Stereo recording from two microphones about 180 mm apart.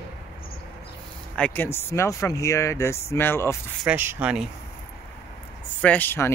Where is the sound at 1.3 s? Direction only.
10° left (ahead or behind).